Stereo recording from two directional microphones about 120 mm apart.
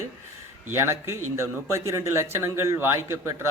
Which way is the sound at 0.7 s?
20° right (ahead or behind).